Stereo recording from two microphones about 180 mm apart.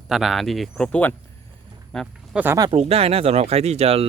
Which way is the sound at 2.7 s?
35° right (ahead or behind).